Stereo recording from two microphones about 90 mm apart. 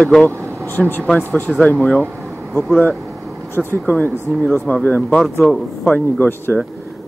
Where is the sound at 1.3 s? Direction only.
10° left (ahead or behind).